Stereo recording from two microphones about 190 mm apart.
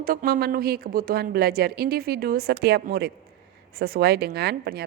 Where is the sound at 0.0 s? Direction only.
50° right (ahead or behind).